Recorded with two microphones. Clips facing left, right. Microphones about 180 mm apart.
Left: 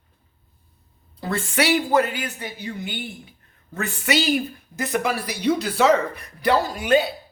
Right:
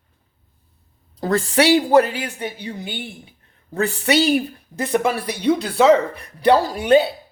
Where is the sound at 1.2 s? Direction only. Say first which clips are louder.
Right 6 dB; 40° right (ahead or behind).